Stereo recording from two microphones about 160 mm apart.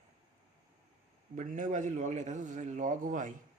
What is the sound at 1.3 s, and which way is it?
A man's voice, 55° right (ahead or behind).